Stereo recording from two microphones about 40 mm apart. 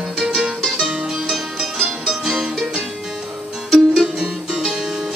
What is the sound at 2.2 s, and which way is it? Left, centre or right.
Music, centre.